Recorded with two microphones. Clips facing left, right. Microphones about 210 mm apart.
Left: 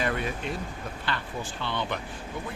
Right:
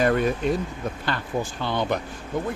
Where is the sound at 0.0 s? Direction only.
45° right (ahead or behind).